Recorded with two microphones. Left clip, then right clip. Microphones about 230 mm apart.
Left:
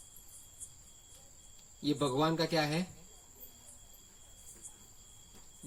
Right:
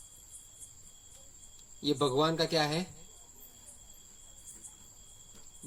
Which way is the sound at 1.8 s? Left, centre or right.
Right.